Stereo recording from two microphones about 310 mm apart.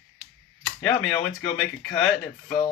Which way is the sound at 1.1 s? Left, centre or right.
Centre.